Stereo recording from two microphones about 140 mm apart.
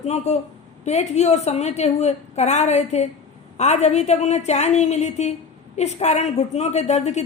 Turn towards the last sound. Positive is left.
turn(degrees=55)  # may be behind; listen again after turning